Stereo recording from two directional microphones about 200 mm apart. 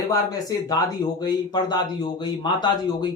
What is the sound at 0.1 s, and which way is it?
A man's voice, 20° left (ahead or behind).